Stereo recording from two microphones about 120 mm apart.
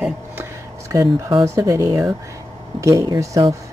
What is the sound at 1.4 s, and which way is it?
Speech, 25° right (ahead or behind).